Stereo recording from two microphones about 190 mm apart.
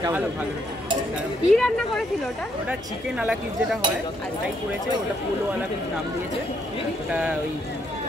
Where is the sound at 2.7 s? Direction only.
5° right (ahead or behind).